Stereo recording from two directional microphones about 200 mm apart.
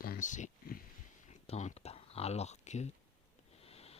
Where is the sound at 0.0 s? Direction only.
45° left (ahead or behind).